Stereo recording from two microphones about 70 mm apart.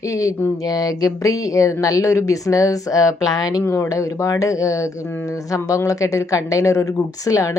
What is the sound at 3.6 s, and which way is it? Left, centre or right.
Speech, left.